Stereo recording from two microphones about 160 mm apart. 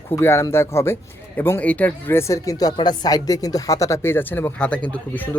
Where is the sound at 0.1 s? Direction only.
15° left (ahead or behind).